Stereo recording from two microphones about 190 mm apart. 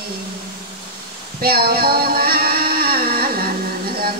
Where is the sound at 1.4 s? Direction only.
55° right (ahead or behind).